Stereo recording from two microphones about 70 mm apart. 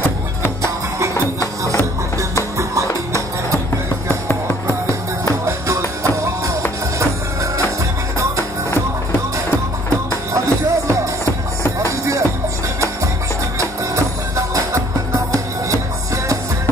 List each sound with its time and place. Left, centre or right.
0.6 s music: right
2.5 s music: right
4.1 s music: left
5.2 s music: right
10.3 s music: right
13.6 s music: right